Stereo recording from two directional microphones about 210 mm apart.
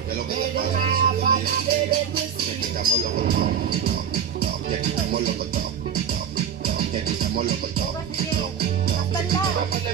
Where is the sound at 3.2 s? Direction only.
45° right (ahead or behind).